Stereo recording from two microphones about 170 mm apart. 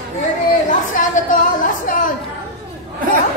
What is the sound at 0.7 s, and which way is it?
A woman's voice, 50° left (ahead or behind).